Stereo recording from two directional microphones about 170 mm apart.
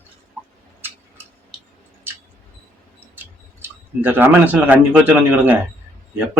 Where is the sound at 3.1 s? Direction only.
10° right (ahead or behind).